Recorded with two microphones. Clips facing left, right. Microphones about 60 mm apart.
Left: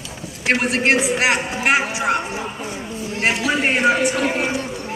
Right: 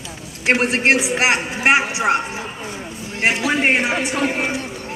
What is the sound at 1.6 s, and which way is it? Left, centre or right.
Speech, centre.